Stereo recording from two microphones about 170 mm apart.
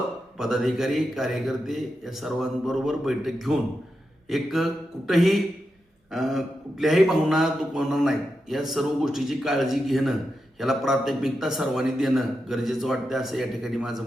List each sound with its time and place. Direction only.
0.3 s speech: centre (ahead or behind)